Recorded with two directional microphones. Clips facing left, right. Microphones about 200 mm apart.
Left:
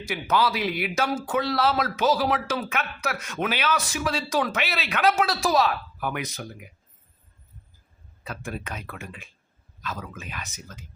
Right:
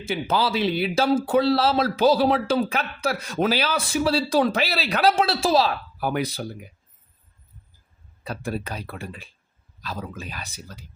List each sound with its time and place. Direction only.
0.0 s a man's voice: 30° right (ahead or behind)
8.2 s a man's voice: 35° right (ahead or behind)